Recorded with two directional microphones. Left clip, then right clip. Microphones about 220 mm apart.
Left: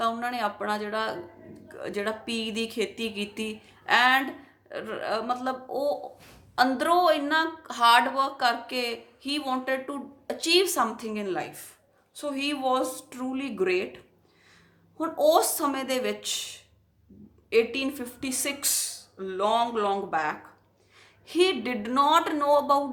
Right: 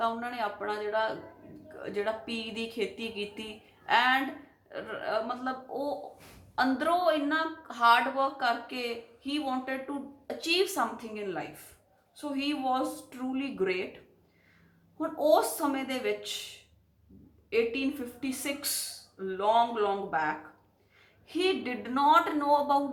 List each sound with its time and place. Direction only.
0.0 s a woman's voice: 50° left (ahead or behind)
14.9 s a woman's voice: 45° left (ahead or behind)
17.5 s a woman's voice: 50° left (ahead or behind)